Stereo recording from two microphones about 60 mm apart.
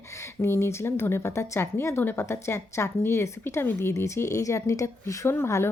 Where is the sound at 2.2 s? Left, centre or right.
Left.